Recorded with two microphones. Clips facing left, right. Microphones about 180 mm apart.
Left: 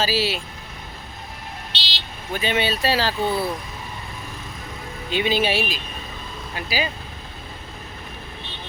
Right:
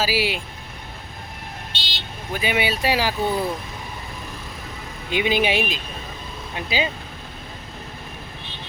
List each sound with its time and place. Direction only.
0.0 s speech: 10° right (ahead or behind)
1.7 s vehicle: 50° right (ahead or behind)
2.4 s speech: 10° right (ahead or behind)
5.1 s speech: 15° right (ahead or behind)